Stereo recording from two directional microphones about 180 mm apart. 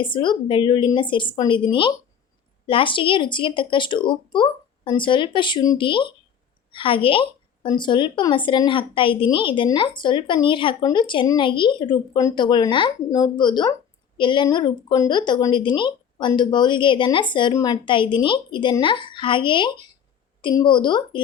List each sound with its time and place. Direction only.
0.0 s speech: 25° left (ahead or behind)